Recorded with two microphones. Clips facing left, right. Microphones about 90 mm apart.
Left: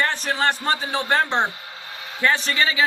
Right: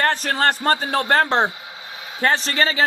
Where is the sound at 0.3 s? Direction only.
45° right (ahead or behind).